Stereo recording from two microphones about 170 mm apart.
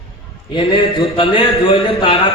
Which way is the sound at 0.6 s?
30° left (ahead or behind).